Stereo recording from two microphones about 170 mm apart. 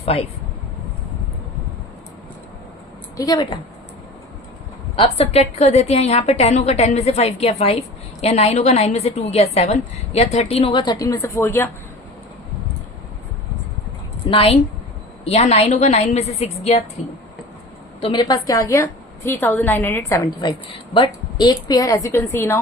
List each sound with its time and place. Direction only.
0.0 s speech: 35° left (ahead or behind)
3.2 s a woman's voice: 20° left (ahead or behind)
4.9 s a woman's voice: 35° left (ahead or behind); by 11.7 s 15° left (ahead or behind)
14.3 s a woman's voice: 35° left (ahead or behind)
18.0 s a woman's voice: 25° left (ahead or behind)
20.9 s a woman's voice: 25° left (ahead or behind)